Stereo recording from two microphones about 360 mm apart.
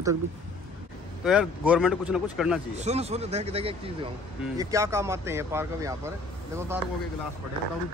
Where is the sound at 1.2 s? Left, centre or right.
Centre.